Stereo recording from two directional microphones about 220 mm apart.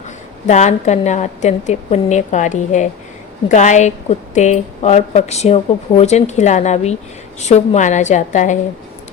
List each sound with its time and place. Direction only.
0.4 s a woman's voice: 30° left (ahead or behind)